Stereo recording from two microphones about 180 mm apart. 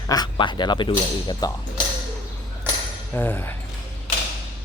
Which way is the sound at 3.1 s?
10° left (ahead or behind).